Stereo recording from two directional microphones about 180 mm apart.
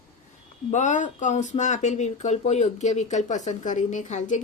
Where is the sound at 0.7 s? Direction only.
45° left (ahead or behind).